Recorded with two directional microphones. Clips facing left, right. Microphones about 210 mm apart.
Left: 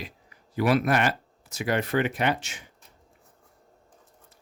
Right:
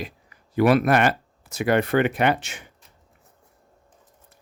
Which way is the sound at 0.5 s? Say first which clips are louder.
Right 5 dB; 60° right (ahead or behind).